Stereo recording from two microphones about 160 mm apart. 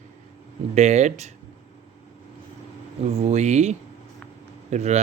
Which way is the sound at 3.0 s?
40° right (ahead or behind).